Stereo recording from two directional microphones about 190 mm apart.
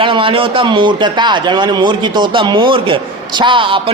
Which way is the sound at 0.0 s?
25° right (ahead or behind).